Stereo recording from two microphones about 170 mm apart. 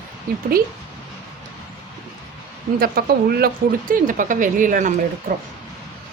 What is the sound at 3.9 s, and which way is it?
A woman's voice, 50° right (ahead or behind).